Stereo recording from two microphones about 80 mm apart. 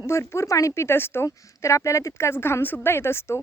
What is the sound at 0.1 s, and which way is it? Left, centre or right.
Speech, left.